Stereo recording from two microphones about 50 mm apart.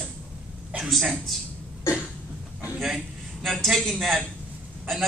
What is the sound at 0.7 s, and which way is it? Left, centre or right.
Speech, right.